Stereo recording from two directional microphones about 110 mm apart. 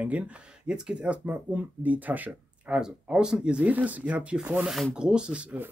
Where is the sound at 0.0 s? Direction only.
10° right (ahead or behind).